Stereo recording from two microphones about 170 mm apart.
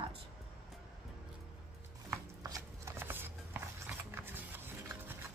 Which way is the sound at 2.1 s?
20° right (ahead or behind).